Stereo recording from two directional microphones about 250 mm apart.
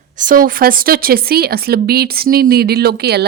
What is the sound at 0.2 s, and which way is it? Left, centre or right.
A woman's voice, right.